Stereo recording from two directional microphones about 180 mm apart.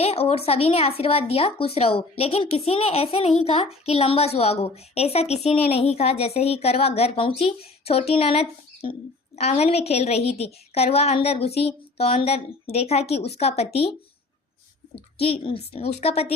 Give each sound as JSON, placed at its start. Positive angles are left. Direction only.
{"t": 0.0, "sound": "speech", "side_deg": 35}
{"t": 15.2, "sound": "speech", "side_deg": 30}